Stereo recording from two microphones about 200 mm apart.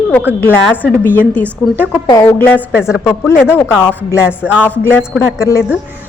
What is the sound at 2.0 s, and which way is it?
Speech, 15° left (ahead or behind).